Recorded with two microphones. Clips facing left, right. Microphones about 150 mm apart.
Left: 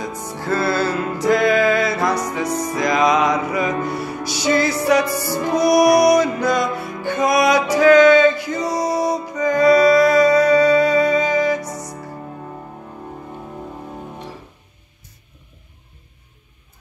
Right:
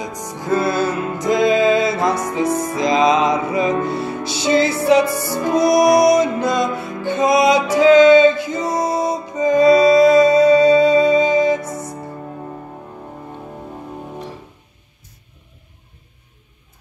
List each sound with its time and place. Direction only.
0.0 s music: 15° right (ahead or behind)